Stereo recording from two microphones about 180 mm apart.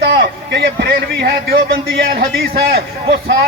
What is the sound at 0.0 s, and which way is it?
A man's voice, 60° right (ahead or behind).